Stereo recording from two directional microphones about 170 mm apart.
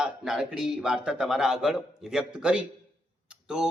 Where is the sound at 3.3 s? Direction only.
5° right (ahead or behind).